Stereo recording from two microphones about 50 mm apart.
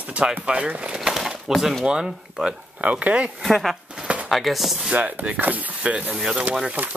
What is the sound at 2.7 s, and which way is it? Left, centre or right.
Speech, right.